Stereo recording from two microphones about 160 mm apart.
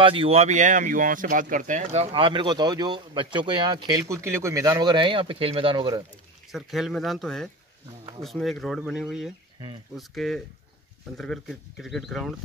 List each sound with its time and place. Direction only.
0.0 s speech: 35° right (ahead or behind)
6.5 s speech: centre (ahead or behind)